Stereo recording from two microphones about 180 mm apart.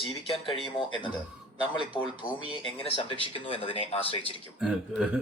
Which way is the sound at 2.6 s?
30° left (ahead or behind).